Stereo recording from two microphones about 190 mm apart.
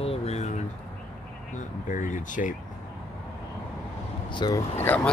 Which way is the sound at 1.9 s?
45° left (ahead or behind).